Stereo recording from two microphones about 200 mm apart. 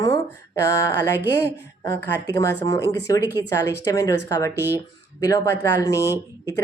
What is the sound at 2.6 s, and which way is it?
Speech, 15° left (ahead or behind).